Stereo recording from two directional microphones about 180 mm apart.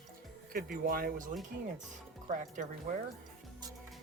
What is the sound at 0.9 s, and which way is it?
Speech, 55° right (ahead or behind).